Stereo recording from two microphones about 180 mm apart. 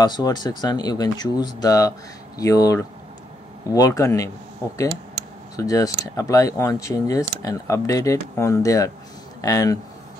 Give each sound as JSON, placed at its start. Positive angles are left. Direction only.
{"t": 0.0, "sound": "speech", "side_deg": 20}
{"t": 5.6, "sound": "speech", "side_deg": 20}